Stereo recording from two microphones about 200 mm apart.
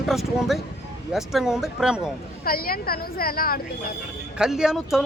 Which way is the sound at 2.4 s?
45° left (ahead or behind).